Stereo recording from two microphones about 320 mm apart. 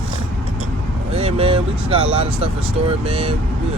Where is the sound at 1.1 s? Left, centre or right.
Centre.